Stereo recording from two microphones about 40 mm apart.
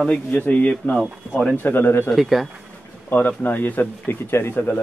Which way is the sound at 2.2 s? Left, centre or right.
Centre.